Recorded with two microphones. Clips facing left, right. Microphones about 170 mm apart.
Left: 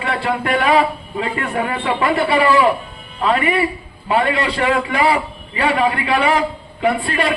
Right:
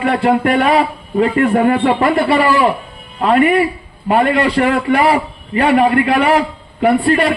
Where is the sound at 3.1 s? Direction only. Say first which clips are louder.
Right 5 dB; 40° right (ahead or behind).